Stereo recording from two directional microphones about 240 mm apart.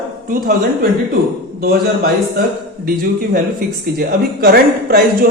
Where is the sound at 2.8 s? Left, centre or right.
Right.